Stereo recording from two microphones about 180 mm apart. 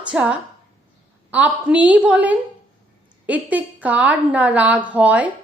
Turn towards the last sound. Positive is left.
turn(degrees=-10)  # may be behind; listen again after turning